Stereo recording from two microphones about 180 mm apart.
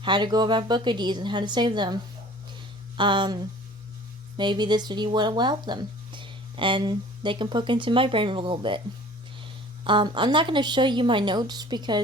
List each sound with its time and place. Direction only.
0.0 s speech: 25° right (ahead or behind)
3.0 s speech: 25° right (ahead or behind)